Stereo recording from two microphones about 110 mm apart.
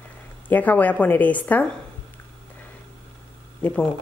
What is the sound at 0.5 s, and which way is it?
A woman's voice, 15° left (ahead or behind).